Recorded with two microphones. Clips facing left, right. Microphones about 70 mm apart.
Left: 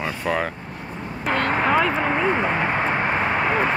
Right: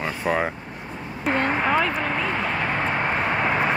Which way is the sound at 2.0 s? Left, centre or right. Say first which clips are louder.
Left 4 dB; centre.